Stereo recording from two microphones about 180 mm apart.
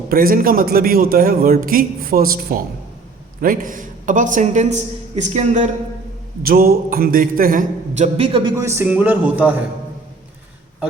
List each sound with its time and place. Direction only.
0.1 s a man's voice: 55° right (ahead or behind)
6.4 s a man's voice: 55° right (ahead or behind); by 8.5 s 30° right (ahead or behind)
8.5 s a man's voice: 15° right (ahead or behind)